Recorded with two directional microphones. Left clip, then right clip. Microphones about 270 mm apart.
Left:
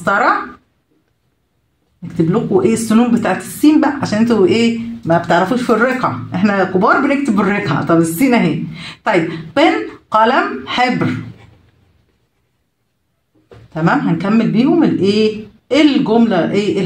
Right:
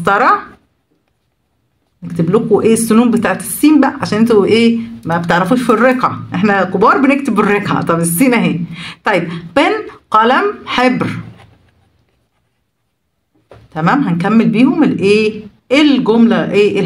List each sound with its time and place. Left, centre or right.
2.6 s speech: right
13.7 s speech: right